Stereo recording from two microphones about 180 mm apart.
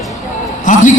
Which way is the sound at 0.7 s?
45° left (ahead or behind).